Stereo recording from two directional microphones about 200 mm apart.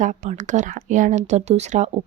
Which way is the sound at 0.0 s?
40° right (ahead or behind).